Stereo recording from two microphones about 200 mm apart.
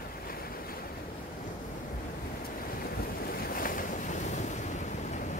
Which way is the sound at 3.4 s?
45° left (ahead or behind).